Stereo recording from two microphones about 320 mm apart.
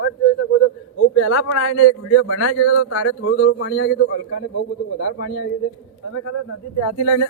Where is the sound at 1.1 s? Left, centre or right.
Left.